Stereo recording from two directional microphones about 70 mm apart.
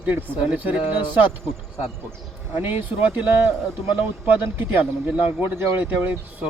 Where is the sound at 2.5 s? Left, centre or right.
Right.